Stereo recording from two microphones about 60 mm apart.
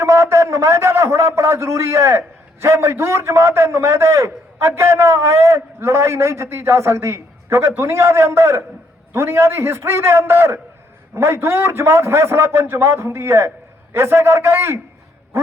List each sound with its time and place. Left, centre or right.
0.0 s a man's voice: right